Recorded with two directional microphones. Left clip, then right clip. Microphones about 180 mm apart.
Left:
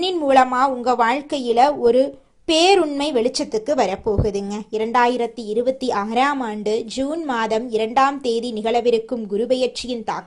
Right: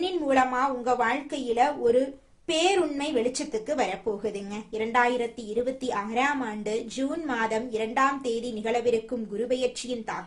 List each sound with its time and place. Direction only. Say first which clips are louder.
0.0 s a woman's voice: left 8 dB; 45° left (ahead or behind)